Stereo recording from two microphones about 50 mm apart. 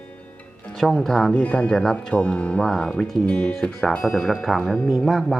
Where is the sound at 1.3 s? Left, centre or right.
Left.